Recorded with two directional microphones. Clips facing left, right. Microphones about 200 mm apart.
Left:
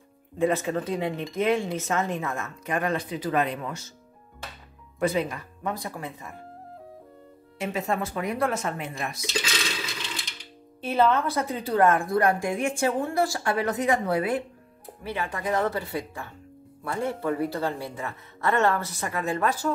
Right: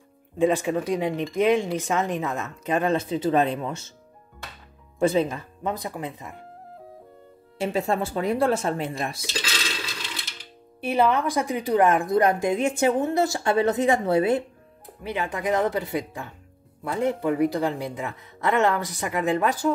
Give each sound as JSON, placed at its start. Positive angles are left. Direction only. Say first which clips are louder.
{"t": 0.4, "sound": "a woman's voice", "louder": "right 3 dB", "side_deg": -15}
{"t": 4.9, "sound": "a woman's voice", "louder": "right 4 dB", "side_deg": -25}
{"t": 7.5, "sound": "speech", "louder": "right 4 dB", "side_deg": -30}
{"t": 10.8, "sound": "a woman's voice", "louder": "right 1 dB", "side_deg": -15}